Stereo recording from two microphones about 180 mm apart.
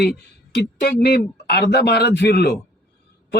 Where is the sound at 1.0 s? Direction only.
65° left (ahead or behind).